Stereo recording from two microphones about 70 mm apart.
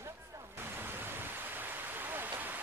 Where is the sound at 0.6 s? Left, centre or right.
Right.